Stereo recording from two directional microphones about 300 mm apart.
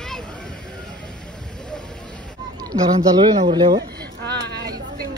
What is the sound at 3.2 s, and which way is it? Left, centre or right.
Speech, centre.